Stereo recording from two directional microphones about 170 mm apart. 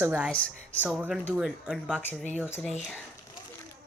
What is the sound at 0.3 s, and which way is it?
Speech, 10° left (ahead or behind).